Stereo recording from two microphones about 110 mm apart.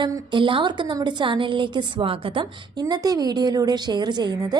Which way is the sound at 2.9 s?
35° right (ahead or behind).